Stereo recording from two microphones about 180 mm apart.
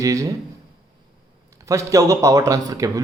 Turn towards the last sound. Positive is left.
turn(degrees=-20)  # may be behind; listen again after turning